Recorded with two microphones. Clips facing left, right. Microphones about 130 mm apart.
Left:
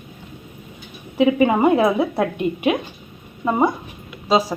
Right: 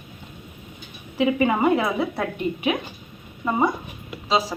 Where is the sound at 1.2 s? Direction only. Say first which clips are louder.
Left 4 dB; 20° left (ahead or behind).